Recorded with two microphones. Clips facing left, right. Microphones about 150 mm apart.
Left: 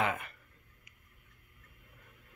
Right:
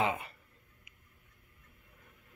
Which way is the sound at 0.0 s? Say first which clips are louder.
Right 1 dB; 30° right (ahead or behind).